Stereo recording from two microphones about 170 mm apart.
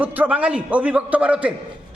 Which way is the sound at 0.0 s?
10° right (ahead or behind).